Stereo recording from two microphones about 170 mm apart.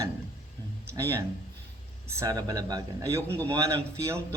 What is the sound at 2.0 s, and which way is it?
Speech, 20° right (ahead or behind).